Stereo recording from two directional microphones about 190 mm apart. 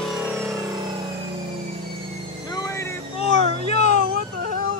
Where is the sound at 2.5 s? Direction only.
15° left (ahead or behind).